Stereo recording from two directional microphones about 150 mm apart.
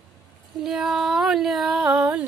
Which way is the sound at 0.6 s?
5° right (ahead or behind).